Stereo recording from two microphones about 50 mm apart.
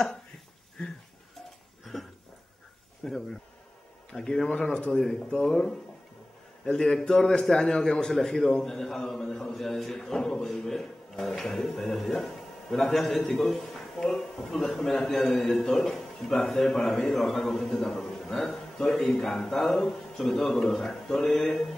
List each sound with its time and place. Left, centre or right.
1.9 s a sound: centre
3.0 s a man's voice: centre
4.7 s a man's voice: left; by 21.5 s centre